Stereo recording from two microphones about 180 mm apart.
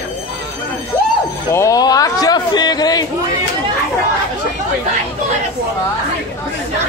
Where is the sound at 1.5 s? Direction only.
20° left (ahead or behind).